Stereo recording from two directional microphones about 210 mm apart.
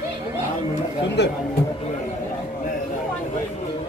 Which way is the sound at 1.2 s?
55° left (ahead or behind).